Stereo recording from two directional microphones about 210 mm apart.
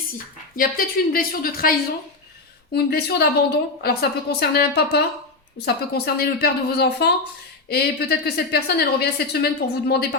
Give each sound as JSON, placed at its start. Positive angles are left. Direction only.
{"t": 0.5, "sound": "a woman's voice", "side_deg": 45}
{"t": 2.7, "sound": "a woman's voice", "side_deg": 50}